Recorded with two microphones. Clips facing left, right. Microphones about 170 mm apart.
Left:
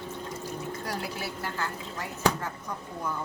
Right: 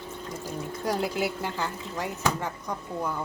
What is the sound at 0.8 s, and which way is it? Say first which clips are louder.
A woman's voice: right 12 dB; 15° right (ahead or behind).